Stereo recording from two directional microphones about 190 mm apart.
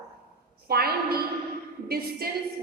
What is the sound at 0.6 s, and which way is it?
A woman's voice, 55° right (ahead or behind).